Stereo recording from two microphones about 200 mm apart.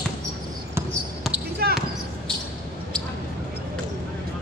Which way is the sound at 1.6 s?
50° right (ahead or behind).